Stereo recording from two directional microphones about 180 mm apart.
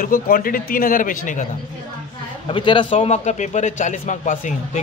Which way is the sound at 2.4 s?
30° left (ahead or behind).